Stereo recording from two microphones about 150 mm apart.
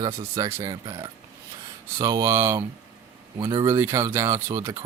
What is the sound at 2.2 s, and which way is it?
Speech, 20° right (ahead or behind).